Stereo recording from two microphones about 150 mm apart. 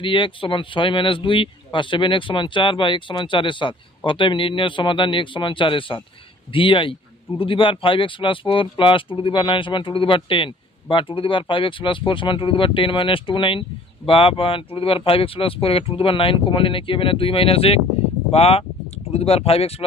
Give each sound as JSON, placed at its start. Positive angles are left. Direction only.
{"t": 0.0, "sound": "speech", "side_deg": 35}